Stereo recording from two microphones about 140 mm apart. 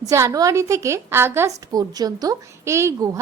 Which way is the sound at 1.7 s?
25° right (ahead or behind).